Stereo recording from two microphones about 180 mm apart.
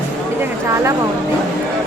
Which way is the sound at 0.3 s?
15° right (ahead or behind).